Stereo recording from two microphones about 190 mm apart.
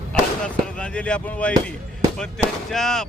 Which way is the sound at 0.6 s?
5° left (ahead or behind).